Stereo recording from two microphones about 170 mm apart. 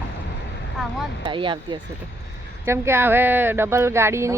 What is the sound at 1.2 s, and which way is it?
Speech, 30° right (ahead or behind).